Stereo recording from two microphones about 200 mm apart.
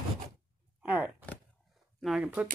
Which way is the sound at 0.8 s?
10° right (ahead or behind).